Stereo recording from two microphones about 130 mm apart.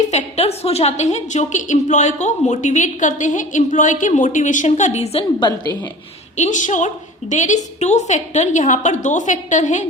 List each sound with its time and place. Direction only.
0.0 s a woman's voice: 60° left (ahead or behind)
5.4 s a woman's voice: 30° left (ahead or behind)
6.3 s a woman's voice: 70° left (ahead or behind)